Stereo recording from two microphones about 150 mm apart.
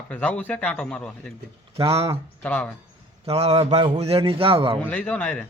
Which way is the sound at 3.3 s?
40° right (ahead or behind).